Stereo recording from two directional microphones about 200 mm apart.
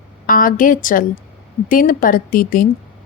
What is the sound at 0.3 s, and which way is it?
Speech, 45° left (ahead or behind).